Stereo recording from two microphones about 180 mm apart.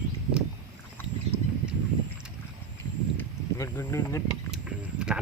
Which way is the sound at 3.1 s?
10° left (ahead or behind).